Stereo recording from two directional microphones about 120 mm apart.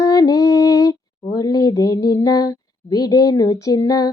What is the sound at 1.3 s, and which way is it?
Speech, 30° left (ahead or behind).